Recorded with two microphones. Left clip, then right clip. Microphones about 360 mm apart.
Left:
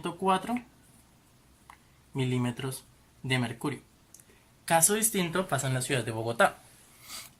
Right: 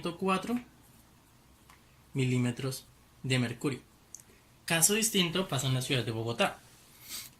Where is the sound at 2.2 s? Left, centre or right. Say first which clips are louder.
Left 1 dB; centre.